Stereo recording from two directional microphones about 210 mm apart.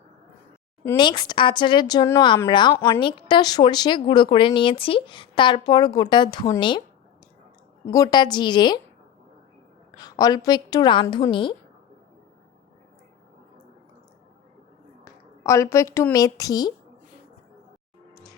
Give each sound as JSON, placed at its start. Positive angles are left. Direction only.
{"t": 0.9, "sound": "speech", "side_deg": 20}
{"t": 7.9, "sound": "speech", "side_deg": 15}
{"t": 10.0, "sound": "speech", "side_deg": 15}
{"t": 15.0, "sound": "a woman's voice", "side_deg": 15}